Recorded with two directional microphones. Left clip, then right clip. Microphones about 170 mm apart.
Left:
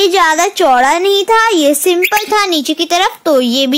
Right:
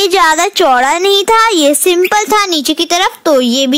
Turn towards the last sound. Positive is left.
turn(degrees=-10)  # may be behind; listen again after turning